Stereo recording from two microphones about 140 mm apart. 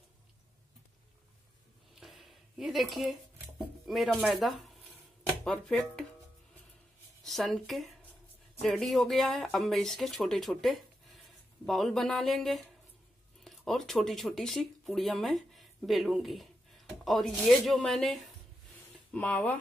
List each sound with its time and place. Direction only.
2.0 s a sound: centre (ahead or behind)
3.8 s speech: centre (ahead or behind)
7.2 s speech: centre (ahead or behind)